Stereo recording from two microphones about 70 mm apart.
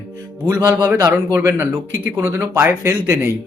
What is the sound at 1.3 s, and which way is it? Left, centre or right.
Speech, right.